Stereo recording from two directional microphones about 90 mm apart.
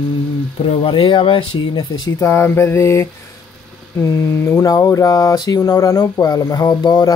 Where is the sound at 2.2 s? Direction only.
30° left (ahead or behind).